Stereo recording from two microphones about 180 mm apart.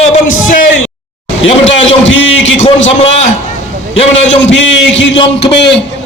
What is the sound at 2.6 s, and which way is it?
Speech, 35° left (ahead or behind).